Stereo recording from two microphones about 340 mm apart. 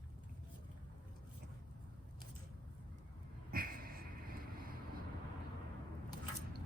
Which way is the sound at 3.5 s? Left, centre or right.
Right.